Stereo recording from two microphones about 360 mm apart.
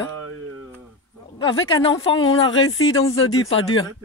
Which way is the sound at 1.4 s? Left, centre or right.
Left.